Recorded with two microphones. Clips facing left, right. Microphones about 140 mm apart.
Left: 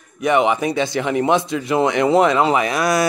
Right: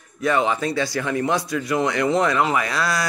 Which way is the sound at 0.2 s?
20° left (ahead or behind).